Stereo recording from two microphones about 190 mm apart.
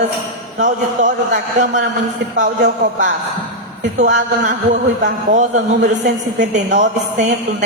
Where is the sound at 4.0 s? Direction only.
45° right (ahead or behind).